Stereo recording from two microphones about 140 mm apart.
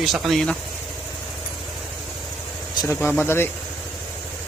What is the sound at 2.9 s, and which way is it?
Speech, 15° left (ahead or behind).